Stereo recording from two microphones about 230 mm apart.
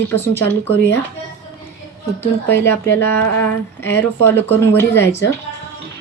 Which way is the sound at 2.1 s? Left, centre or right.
Centre.